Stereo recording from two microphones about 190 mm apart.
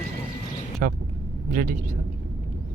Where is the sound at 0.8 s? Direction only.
50° right (ahead or behind).